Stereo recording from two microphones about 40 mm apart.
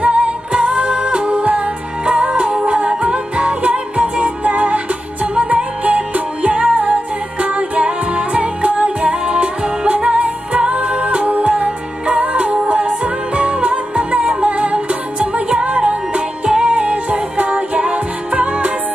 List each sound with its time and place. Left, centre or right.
0.0 s music: right